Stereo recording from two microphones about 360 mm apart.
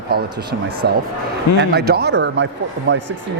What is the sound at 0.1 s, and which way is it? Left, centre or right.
Speech, right.